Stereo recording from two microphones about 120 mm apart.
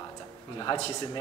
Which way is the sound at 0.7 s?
45° left (ahead or behind).